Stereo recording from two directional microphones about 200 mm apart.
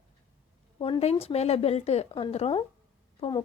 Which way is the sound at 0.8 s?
30° left (ahead or behind).